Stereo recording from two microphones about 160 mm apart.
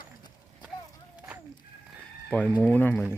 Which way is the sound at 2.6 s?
10° left (ahead or behind).